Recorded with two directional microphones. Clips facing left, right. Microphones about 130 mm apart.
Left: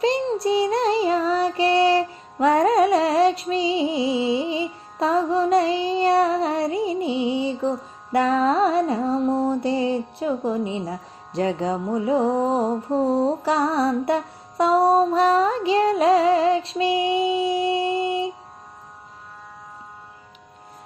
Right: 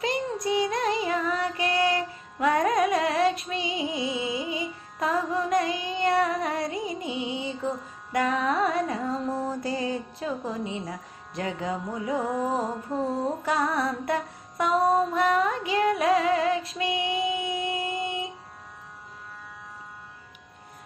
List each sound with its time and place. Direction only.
0.0 s child singing: 30° left (ahead or behind)
11.3 s music: 30° left (ahead or behind)